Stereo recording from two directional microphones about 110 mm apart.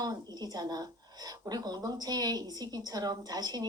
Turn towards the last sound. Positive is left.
turn(degrees=-35)  # may be behind; listen again after turning